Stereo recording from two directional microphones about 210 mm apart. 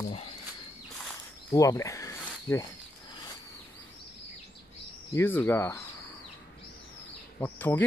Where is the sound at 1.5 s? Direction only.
15° left (ahead or behind).